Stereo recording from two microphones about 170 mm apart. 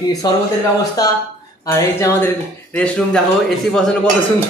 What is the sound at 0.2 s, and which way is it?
Speech, 20° left (ahead or behind).